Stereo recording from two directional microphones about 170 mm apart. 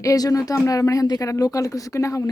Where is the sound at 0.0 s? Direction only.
20° left (ahead or behind).